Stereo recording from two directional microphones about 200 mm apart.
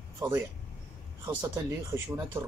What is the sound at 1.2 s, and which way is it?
A man's voice, 15° right (ahead or behind).